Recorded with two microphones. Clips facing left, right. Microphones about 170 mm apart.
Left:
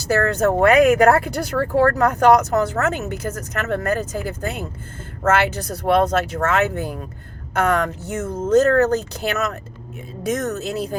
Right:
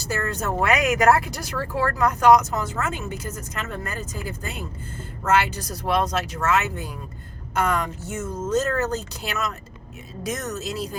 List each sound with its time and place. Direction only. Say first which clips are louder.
0.1 s speech: left 9 dB; 70° left (ahead or behind)
0.4 s speech: left 9 dB; 55° left (ahead or behind)